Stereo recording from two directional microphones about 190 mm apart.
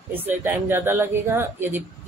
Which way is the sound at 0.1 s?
10° right (ahead or behind).